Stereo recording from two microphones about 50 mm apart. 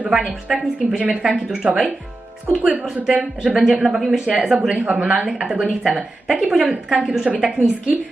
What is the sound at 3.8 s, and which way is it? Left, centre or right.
Speech, centre.